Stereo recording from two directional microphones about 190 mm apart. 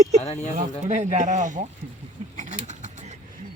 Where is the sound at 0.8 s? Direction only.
40° right (ahead or behind).